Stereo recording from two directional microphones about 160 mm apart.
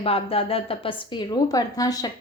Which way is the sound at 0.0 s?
35° left (ahead or behind).